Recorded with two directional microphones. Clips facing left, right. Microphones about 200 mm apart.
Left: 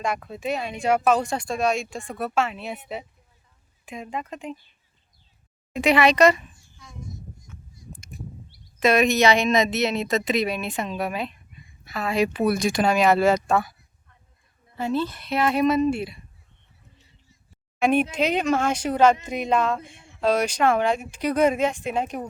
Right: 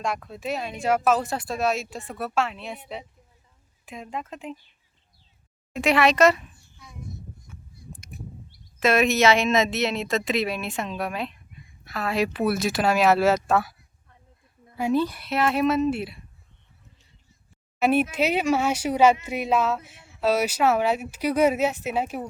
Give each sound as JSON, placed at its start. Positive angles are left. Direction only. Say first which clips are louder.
{"t": 0.0, "sound": "speech", "louder": "left 2 dB", "side_deg": 0}
{"t": 3.8, "sound": "speech", "louder": "left 2 dB", "side_deg": 0}
{"t": 5.7, "sound": "a child's voice", "louder": "left 2 dB", "side_deg": 0}
{"t": 8.8, "sound": "speech", "louder": "left 1 dB", "side_deg": 0}
{"t": 14.8, "sound": "speech", "louder": "right 2 dB", "side_deg": -15}
{"t": 17.7, "sound": "speech", "louder": "even", "side_deg": -5}